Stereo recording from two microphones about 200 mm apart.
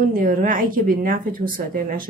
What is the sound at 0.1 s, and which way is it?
Speech, 45° right (ahead or behind).